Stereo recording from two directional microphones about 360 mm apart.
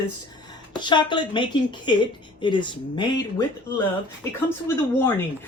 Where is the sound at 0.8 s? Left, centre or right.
Centre.